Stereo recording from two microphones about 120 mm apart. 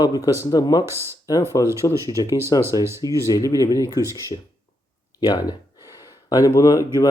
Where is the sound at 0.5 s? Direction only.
35° left (ahead or behind).